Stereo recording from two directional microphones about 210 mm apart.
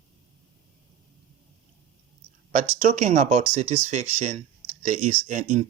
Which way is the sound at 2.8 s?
35° right (ahead or behind).